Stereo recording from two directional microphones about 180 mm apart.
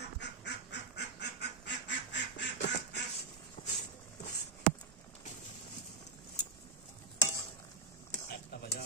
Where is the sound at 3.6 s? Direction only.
30° left (ahead or behind).